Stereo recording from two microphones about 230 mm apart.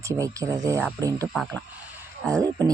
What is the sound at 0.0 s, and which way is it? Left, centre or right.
Speech, centre.